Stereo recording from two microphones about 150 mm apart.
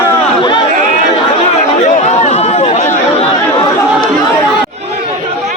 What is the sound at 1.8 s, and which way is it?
Chatter, 50° left (ahead or behind).